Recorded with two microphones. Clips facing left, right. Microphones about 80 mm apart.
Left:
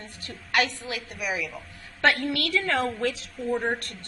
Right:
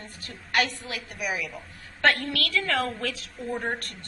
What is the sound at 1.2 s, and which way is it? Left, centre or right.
Speech, centre.